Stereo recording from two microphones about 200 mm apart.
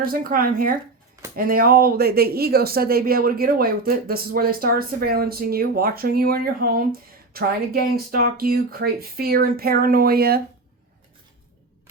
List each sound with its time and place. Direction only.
0.0 s speech: 45° right (ahead or behind)